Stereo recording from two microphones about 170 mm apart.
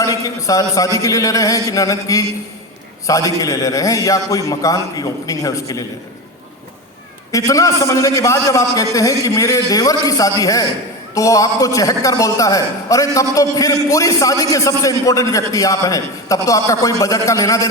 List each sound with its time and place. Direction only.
0.0 s a man's voice: 20° left (ahead or behind)
7.3 s a man's voice: 20° left (ahead or behind)